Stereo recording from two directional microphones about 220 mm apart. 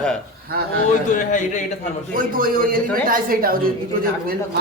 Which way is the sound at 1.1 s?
35° left (ahead or behind).